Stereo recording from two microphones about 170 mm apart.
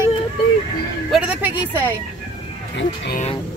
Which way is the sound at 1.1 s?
5° right (ahead or behind).